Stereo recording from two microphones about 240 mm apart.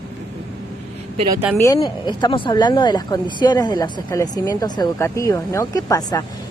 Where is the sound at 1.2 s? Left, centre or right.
Centre.